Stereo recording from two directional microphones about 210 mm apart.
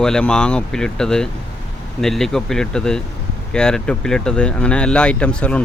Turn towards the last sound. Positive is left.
turn(degrees=5)  # may be behind; listen again after turning